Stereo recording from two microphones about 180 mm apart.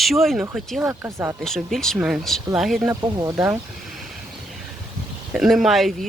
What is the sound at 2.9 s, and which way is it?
Speech, 15° right (ahead or behind).